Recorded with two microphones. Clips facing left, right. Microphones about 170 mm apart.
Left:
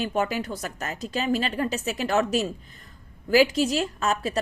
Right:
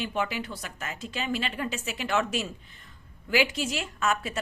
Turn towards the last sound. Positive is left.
turn(degrees=35)  # may be behind; listen again after turning